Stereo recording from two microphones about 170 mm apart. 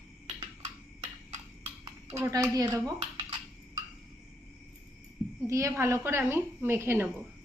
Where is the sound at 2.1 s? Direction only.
20° right (ahead or behind).